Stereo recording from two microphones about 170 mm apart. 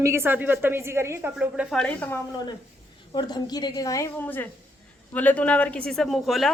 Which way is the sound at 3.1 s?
25° left (ahead or behind).